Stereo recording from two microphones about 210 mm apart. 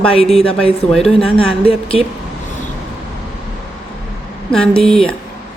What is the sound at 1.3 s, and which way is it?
Speech, 25° left (ahead or behind).